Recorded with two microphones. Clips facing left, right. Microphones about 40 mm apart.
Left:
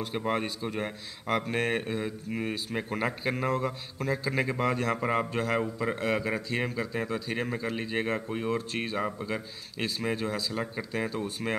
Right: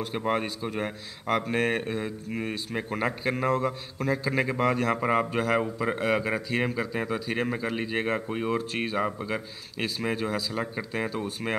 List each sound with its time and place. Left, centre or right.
0.0 s a man's voice: centre